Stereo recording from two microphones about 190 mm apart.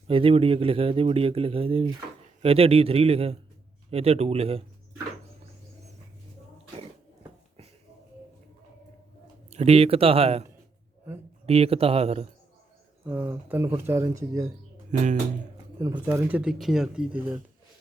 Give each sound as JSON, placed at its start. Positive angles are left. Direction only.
{"t": 0.1, "sound": "a man's voice", "side_deg": -30}
{"t": 9.5, "sound": "a man's voice", "side_deg": -35}
{"t": 13.1, "sound": "speech", "side_deg": -10}
{"t": 14.8, "sound": "speech", "side_deg": -40}
{"t": 15.5, "sound": "a sound", "side_deg": -20}
{"t": 16.0, "sound": "speech", "side_deg": -10}